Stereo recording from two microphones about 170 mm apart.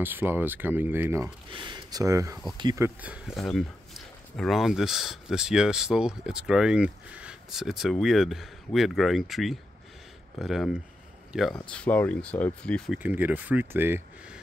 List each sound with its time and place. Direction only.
0.0 s speech: 10° right (ahead or behind)
1.5 s speech: 25° right (ahead or behind)
2.8 s speech: 10° right (ahead or behind)
11.7 s speech: 10° left (ahead or behind)
13.0 s speech: 10° right (ahead or behind)